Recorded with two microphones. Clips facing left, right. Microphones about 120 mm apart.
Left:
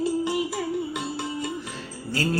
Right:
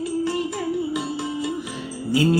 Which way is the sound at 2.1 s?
15° right (ahead or behind).